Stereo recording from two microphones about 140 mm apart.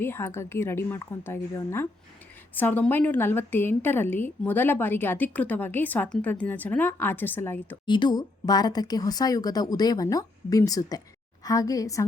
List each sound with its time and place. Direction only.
0.0 s a woman's voice: 15° left (ahead or behind)
7.9 s speech: 35° left (ahead or behind)